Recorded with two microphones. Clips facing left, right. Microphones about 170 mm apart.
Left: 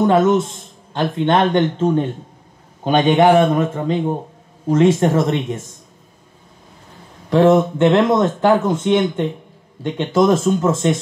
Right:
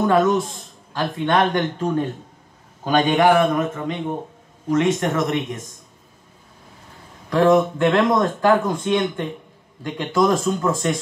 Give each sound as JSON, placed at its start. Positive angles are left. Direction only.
{"t": 0.0, "sound": "a man's voice", "side_deg": 20}
{"t": 7.2, "sound": "a man's voice", "side_deg": 25}